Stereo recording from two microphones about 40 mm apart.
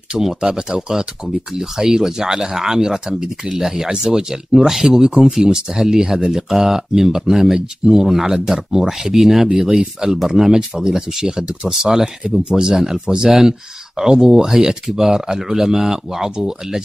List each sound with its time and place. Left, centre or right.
0.2 s speech: centre